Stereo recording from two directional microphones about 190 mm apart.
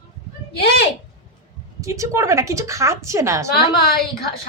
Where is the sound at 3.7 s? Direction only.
55° left (ahead or behind).